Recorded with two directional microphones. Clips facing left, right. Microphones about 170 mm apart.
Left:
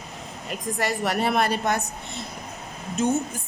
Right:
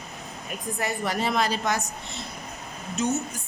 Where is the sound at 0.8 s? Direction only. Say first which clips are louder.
Left 3 dB; 75° left (ahead or behind); by 1.8 s 60° left (ahead or behind).